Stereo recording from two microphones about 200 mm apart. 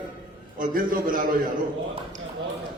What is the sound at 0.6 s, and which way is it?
Speech, 45° right (ahead or behind).